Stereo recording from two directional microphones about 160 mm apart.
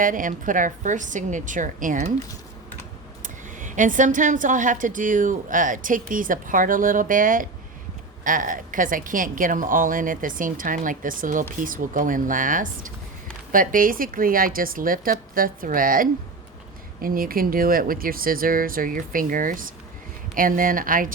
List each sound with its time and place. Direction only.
0.0 s a woman's voice: 55° right (ahead or behind)
3.2 s a woman's voice: 55° right (ahead or behind)